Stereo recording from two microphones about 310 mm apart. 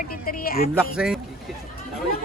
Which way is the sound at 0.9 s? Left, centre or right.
Centre.